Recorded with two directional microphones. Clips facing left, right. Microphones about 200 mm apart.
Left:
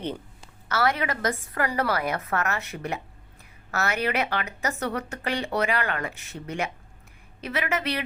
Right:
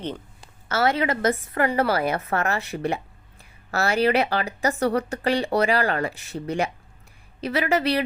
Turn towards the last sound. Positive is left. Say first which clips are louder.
# right 6 dB
turn(degrees=-35)  # may be behind; listen again after turning